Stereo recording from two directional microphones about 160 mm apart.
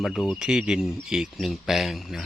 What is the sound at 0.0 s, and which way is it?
Speech, centre (ahead or behind).